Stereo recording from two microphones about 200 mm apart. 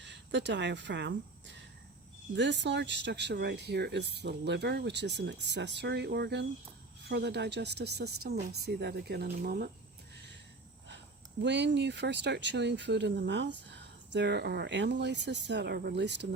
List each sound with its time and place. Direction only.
0.0 s speech: 60° right (ahead or behind)
11.4 s speech: 60° right (ahead or behind)